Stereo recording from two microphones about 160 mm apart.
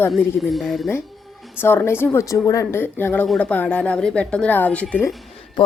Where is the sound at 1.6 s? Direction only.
15° left (ahead or behind).